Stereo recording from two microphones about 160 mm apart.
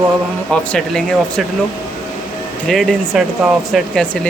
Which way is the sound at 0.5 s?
5° left (ahead or behind).